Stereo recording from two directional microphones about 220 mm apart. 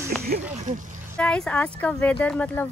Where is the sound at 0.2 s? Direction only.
45° right (ahead or behind).